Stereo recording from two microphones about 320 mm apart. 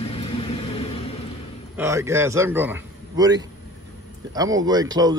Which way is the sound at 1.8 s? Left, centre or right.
Centre.